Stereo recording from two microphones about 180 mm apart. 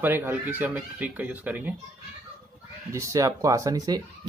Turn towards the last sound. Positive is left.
turn(degrees=-20)  # may be behind; listen again after turning